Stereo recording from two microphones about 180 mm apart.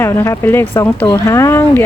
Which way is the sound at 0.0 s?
15° left (ahead or behind).